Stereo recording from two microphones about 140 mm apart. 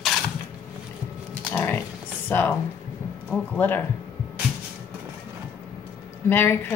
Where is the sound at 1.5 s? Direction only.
15° left (ahead or behind).